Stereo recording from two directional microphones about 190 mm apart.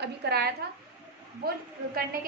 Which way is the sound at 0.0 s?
60° right (ahead or behind).